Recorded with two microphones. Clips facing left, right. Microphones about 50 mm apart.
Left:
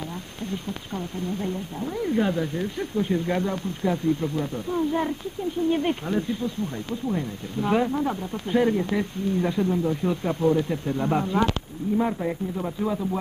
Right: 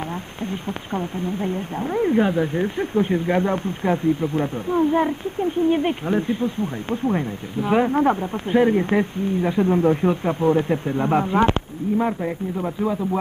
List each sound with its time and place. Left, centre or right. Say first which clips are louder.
0.5 s speech: right 4 dB; right
7.0 s speech: right 6 dB; right
8.5 s speech: right 4 dB; right
8.7 s speech: right 6 dB; right
9.7 s speech: right 6 dB; right
10.2 s speech: right 3 dB; right